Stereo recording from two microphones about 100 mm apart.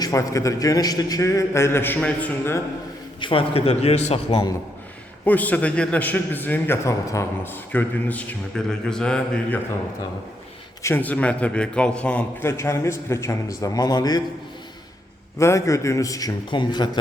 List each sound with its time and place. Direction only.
0.0 s a man's voice: 35° left (ahead or behind); by 2.3 s 15° left (ahead or behind)
3.2 s a man's voice: 60° left (ahead or behind); by 4.4 s 90° left
5.2 s a man's voice: 15° left (ahead or behind)
6.8 s a man's voice: 30° left (ahead or behind); by 9.6 s 10° left (ahead or behind)
10.8 s a man's voice: 20° left (ahead or behind)
12.4 s a man's voice: 25° left (ahead or behind); by 14.2 s 40° left (ahead or behind)
15.4 s a man's voice: 30° left (ahead or behind)
16.5 s a man's voice: 50° left (ahead or behind)